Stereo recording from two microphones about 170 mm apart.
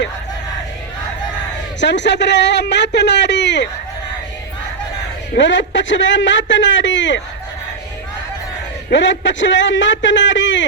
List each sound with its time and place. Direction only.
1.8 s a man's voice: 90° left
5.4 s a man's voice: 90° left
8.9 s a man's voice: 90° left